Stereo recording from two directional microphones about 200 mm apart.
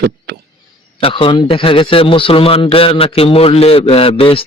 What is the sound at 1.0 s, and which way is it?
A man's voice, 25° left (ahead or behind).